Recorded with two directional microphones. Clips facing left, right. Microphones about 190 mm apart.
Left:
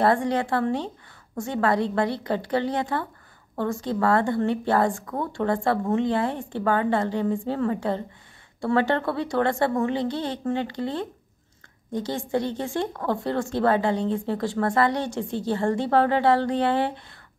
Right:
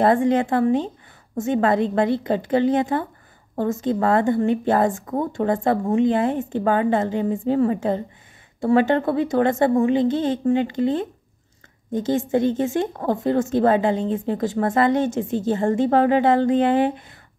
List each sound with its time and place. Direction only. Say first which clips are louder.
0.0 s a woman's voice: right 4 dB; 20° right (ahead or behind)